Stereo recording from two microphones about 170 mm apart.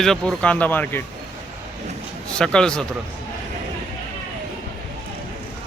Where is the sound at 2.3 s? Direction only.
5° left (ahead or behind).